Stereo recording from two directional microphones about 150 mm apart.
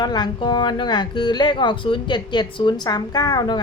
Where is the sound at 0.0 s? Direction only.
30° left (ahead or behind).